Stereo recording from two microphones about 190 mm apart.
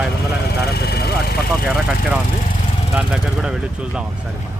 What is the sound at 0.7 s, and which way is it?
Vehicle, 55° left (ahead or behind).